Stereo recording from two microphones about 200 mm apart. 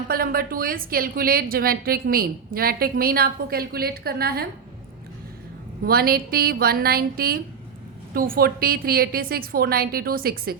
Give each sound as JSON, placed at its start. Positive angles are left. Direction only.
{"t": 0.1, "sound": "a woman's voice", "side_deg": -45}
{"t": 5.8, "sound": "a woman's voice", "side_deg": -50}